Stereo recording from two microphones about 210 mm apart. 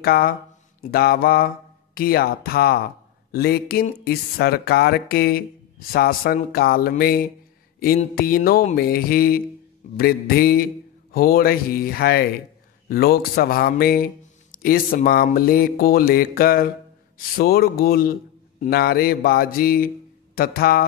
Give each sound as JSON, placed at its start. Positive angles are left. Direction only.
{"t": 0.0, "sound": "mantra", "side_deg": 45}
{"t": 2.0, "sound": "speech", "side_deg": 45}